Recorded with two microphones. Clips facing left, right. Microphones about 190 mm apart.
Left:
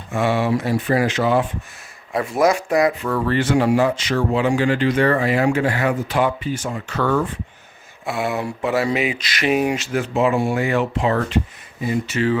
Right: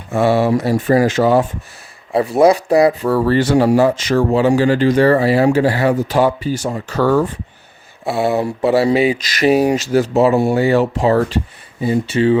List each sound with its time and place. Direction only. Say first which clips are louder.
0.1 s speech: right 5 dB; 35° right (ahead or behind)